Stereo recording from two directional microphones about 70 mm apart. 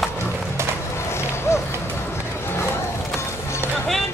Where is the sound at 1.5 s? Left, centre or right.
Left.